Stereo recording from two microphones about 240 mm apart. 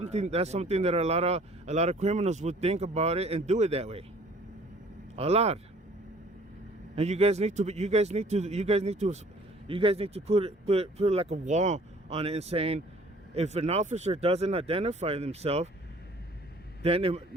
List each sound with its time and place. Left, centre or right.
0.0 s speech: right
5.1 s speech: right
6.9 s speech: right
16.8 s speech: right